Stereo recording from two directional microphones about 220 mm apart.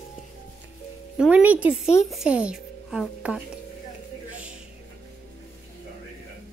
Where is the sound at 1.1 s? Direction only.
5° right (ahead or behind).